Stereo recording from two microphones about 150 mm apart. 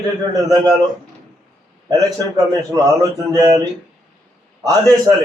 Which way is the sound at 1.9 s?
25° right (ahead or behind).